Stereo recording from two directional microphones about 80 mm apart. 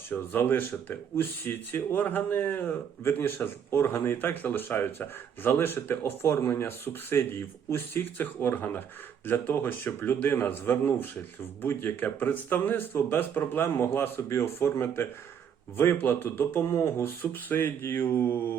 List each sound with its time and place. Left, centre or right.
0.1 s speech: left